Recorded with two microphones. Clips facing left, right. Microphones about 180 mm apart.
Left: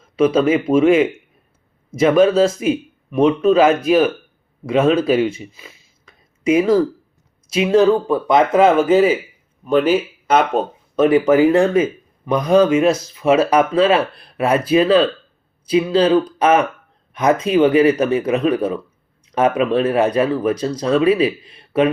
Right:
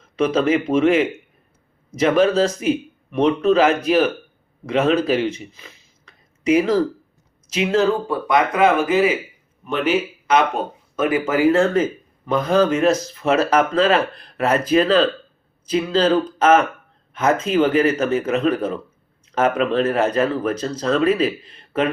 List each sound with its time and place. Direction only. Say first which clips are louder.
0.2 s a man's voice: left 3 dB; 10° left (ahead or behind); by 9.9 s 35° left (ahead or behind)
10.9 s speech: left 7 dB; 20° left (ahead or behind)